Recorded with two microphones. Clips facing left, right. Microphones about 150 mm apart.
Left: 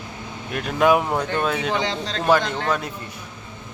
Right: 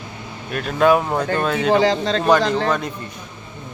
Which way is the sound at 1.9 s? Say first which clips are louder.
Right 8 dB; 40° right (ahead or behind).